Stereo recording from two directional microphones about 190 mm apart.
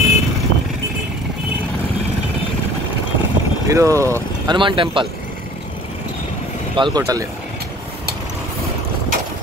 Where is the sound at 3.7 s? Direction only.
15° right (ahead or behind).